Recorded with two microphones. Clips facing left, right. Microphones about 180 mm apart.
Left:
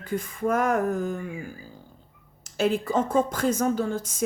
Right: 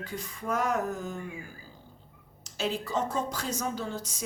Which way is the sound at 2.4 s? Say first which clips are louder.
Left 8 dB; 55° left (ahead or behind).